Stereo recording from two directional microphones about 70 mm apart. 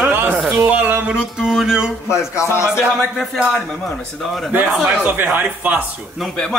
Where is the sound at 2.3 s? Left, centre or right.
Left.